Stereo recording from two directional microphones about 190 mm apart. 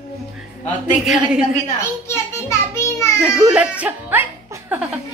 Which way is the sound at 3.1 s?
5° right (ahead or behind).